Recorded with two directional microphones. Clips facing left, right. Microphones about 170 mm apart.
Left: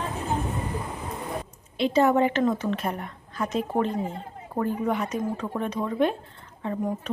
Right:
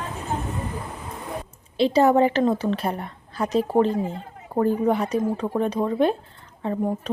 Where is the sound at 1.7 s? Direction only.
35° right (ahead or behind).